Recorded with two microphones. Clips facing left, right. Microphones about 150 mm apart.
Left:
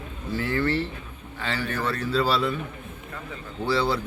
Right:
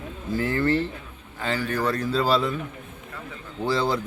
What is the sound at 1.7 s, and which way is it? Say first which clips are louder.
Speech: right 1 dB; 15° right (ahead or behind).